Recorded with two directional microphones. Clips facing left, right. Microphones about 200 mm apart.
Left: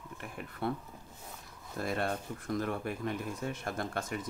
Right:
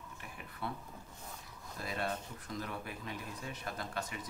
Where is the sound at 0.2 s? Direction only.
55° left (ahead or behind).